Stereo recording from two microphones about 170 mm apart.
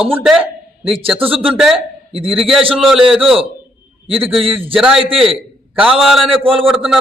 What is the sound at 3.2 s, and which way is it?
Speech, 30° right (ahead or behind).